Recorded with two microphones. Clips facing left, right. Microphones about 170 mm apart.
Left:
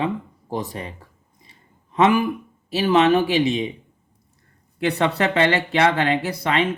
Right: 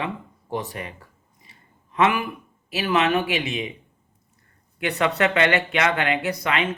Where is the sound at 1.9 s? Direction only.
30° left (ahead or behind).